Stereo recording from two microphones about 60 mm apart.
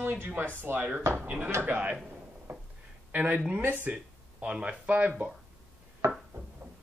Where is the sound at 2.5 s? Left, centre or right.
Right.